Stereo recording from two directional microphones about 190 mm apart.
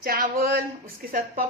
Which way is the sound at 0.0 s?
50° right (ahead or behind).